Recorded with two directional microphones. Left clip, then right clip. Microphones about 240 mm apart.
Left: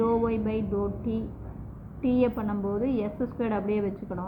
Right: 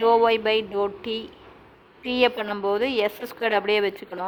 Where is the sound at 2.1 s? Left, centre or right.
Right.